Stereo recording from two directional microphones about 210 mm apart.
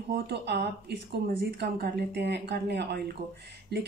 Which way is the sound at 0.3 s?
50° right (ahead or behind).